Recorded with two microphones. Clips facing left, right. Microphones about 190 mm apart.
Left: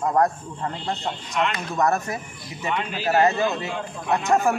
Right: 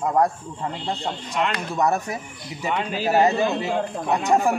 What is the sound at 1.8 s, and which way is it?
A man's voice, 10° right (ahead or behind).